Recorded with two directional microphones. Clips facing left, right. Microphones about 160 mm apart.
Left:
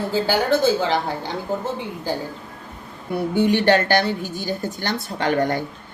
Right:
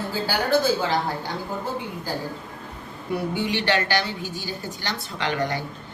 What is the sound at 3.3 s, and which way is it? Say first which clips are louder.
A woman's voice: left 9 dB; 50° left (ahead or behind).